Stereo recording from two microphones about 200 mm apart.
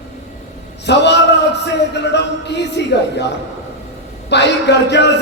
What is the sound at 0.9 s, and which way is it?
A man's voice, 60° left (ahead or behind).